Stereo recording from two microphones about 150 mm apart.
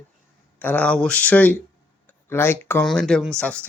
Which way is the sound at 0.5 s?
10° left (ahead or behind).